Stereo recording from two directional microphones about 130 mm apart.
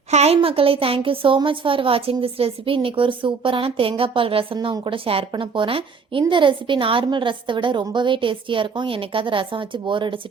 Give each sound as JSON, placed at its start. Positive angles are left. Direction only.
{"t": 0.1, "sound": "a woman's voice", "side_deg": -55}